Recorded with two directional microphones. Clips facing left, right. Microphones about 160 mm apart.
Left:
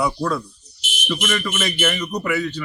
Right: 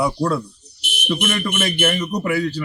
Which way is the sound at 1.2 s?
55° right (ahead or behind).